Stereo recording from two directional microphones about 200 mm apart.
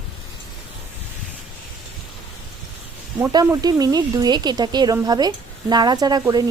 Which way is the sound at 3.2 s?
15° right (ahead or behind).